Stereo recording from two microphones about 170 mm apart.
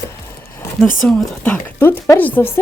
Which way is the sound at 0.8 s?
5° left (ahead or behind).